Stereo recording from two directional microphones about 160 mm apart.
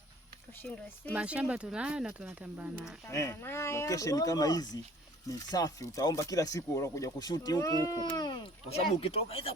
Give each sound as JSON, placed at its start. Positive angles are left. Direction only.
{"t": 1.1, "sound": "speech", "side_deg": -10}
{"t": 3.1, "sound": "speech", "side_deg": 20}
{"t": 9.0, "sound": "speech", "side_deg": 40}